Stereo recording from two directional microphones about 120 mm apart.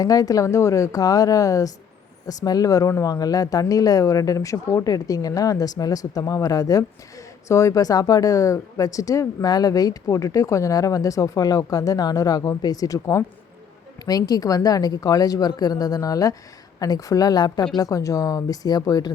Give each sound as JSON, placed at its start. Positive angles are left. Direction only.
{"t": 0.0, "sound": "speech", "side_deg": 30}